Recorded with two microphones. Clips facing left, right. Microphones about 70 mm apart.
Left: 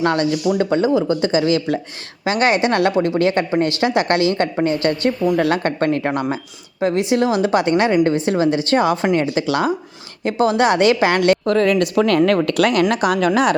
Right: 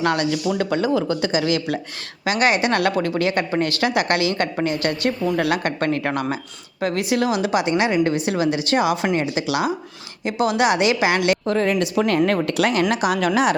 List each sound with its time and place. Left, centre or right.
0.0 s a woman's voice: left
11.4 s a woman's voice: left